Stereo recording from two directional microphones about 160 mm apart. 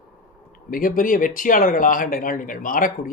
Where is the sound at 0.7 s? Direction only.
60° left (ahead or behind).